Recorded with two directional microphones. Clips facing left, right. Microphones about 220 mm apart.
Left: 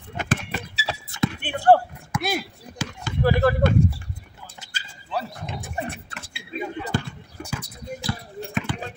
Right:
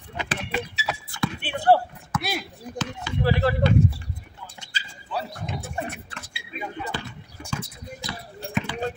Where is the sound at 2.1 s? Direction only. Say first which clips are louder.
Left 2 dB; 10° left (ahead or behind).